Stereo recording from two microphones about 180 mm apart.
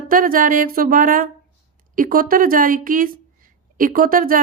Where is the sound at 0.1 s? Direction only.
50° right (ahead or behind).